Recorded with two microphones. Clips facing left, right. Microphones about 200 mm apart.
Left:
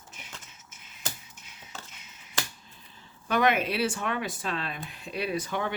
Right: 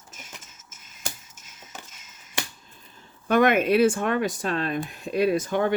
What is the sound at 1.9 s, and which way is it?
Finger snapping, 45° right (ahead or behind).